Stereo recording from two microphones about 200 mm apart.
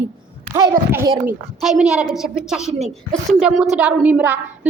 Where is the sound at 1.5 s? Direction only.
Centre (ahead or behind).